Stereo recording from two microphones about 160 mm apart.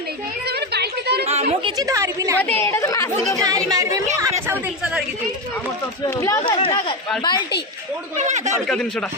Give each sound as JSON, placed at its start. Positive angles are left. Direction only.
{"t": 0.4, "sound": "a sound", "side_deg": -90}
{"t": 1.2, "sound": "a sound", "side_deg": -40}
{"t": 1.8, "sound": "a woman's voice", "side_deg": -20}
{"t": 2.4, "sound": "speech", "side_deg": 15}
{"t": 3.3, "sound": "a woman's voice", "side_deg": -20}
{"t": 6.1, "sound": "speech", "side_deg": 20}
{"t": 8.2, "sound": "a man's voice", "side_deg": -45}
{"t": 8.6, "sound": "speech", "side_deg": 5}